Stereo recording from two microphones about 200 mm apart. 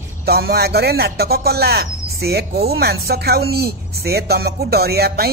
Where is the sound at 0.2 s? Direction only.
50° right (ahead or behind).